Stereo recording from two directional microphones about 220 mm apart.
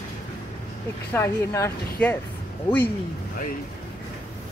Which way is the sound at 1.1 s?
10° left (ahead or behind).